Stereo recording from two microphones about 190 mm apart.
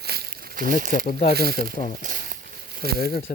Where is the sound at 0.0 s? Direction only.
55° right (ahead or behind).